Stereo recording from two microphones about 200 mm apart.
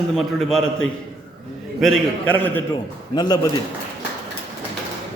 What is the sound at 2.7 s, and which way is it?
Speech, 20° left (ahead or behind).